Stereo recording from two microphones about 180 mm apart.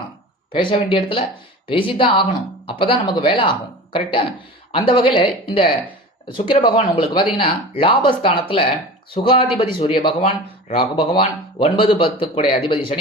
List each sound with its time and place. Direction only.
0.5 s speech: 30° left (ahead or behind)